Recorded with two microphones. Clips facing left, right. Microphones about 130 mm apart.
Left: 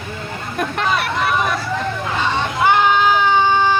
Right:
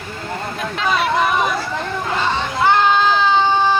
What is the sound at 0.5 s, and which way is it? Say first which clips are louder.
Speech: left 1 dB; 55° left (ahead or behind).